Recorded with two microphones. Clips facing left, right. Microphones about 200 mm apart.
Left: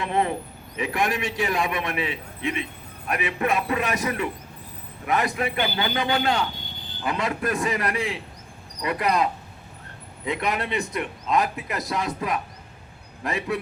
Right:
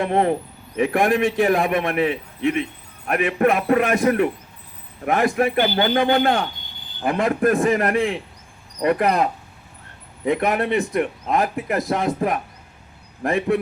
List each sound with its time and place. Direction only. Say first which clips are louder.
0.0 s a man's voice: right 5 dB; 50° right (ahead or behind)